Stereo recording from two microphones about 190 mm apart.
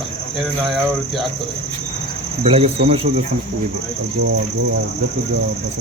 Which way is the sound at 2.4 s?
30° right (ahead or behind).